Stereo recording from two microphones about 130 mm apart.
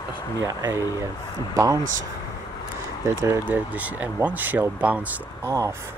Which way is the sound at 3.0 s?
20° right (ahead or behind).